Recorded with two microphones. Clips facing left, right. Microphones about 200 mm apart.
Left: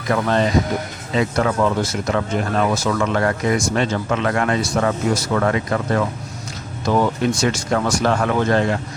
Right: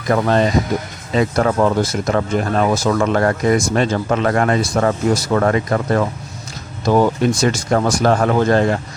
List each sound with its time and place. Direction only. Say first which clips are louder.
0.1 s speech: right 3 dB; 40° right (ahead or behind)